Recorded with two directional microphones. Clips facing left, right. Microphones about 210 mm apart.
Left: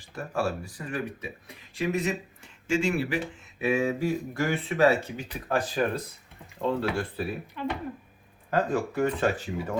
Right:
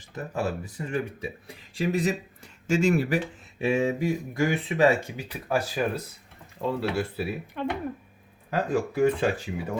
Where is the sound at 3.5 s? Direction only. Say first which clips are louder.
Right 1 dB; 25° right (ahead or behind); by 7.2 s 5° right (ahead or behind).